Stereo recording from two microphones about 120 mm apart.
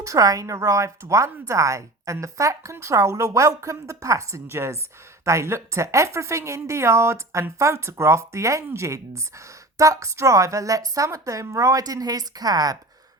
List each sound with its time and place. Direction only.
0.0 s a woman's voice: 30° right (ahead or behind)